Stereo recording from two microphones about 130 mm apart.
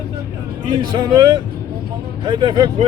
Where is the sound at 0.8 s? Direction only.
35° right (ahead or behind).